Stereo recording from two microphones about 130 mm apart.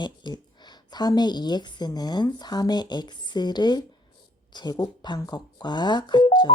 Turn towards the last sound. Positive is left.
turn(degrees=35)  # may be behind; listen again after turning